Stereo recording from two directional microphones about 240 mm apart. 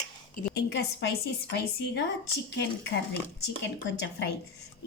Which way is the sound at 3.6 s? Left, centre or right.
Left.